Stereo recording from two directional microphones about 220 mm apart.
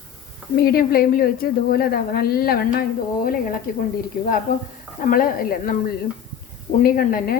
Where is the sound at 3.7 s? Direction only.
40° left (ahead or behind).